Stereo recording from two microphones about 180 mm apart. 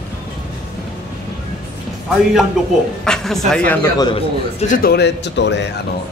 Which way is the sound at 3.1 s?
5° left (ahead or behind).